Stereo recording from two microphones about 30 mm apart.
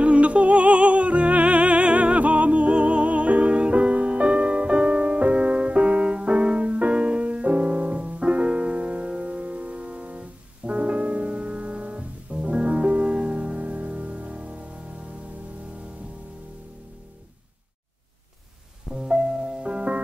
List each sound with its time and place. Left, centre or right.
0.0 s music: right
13.6 s music: right
19.0 s music: right